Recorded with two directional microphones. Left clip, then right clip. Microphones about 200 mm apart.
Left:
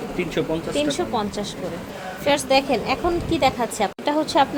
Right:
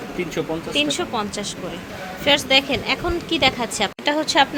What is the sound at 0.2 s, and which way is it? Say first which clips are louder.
A woman's voice: left 1 dB; 5° left (ahead or behind).